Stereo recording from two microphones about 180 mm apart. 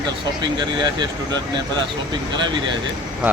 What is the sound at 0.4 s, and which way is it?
Speech, 25° right (ahead or behind).